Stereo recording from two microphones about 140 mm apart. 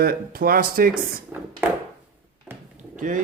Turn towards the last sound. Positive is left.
turn(degrees=-70)  # may be behind; listen again after turning